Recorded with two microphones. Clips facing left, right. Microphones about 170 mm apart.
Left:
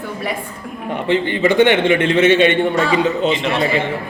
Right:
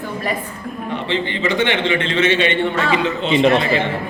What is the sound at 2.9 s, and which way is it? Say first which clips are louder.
Speech: left 3 dB; 40° left (ahead or behind).